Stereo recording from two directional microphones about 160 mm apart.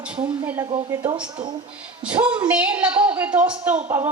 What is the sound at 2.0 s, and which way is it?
A woman's voice, 5° right (ahead or behind).